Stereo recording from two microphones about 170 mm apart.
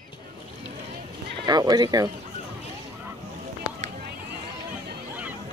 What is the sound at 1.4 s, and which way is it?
Speech, 25° right (ahead or behind).